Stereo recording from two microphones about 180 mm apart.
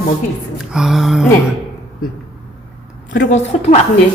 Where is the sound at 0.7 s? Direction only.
Centre (ahead or behind).